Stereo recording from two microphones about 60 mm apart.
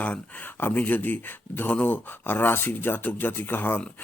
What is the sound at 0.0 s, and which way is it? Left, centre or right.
Speech, left.